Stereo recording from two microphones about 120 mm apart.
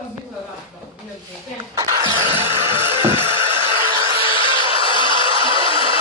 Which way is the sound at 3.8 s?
30° right (ahead or behind).